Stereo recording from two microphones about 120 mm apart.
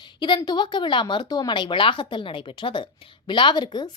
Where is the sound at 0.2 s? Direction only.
40° left (ahead or behind).